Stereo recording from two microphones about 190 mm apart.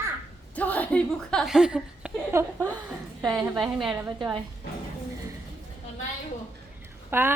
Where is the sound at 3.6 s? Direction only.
Centre (ahead or behind).